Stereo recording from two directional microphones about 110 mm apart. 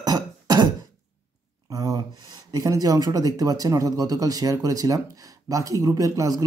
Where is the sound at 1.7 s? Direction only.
35° right (ahead or behind).